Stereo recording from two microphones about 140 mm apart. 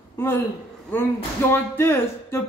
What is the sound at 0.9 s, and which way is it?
Speech, 15° left (ahead or behind).